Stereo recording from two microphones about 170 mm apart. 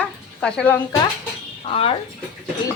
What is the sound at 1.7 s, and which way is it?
Speech, 35° left (ahead or behind).